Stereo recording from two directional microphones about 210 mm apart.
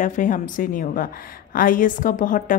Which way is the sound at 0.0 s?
40° left (ahead or behind).